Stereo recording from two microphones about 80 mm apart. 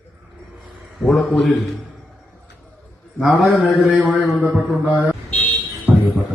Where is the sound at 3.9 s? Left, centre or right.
Centre.